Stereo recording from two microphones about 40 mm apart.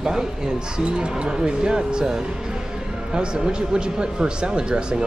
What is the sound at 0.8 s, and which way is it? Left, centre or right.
Speech, right.